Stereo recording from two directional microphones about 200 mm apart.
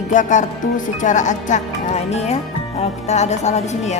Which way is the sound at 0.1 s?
40° left (ahead or behind).